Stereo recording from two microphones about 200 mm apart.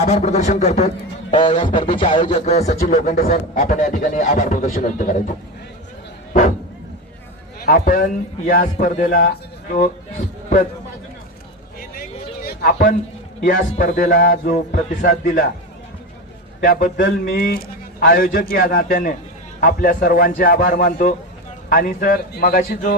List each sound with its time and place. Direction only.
0.0 s a man's voice: 35° left (ahead or behind)
7.6 s a man's voice: 45° left (ahead or behind)
11.8 s a sound: 50° left (ahead or behind)
13.4 s a man's voice: 40° left (ahead or behind)
16.6 s a man's voice: 45° left (ahead or behind)